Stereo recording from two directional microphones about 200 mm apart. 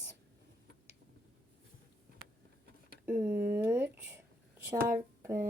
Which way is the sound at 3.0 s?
10° right (ahead or behind).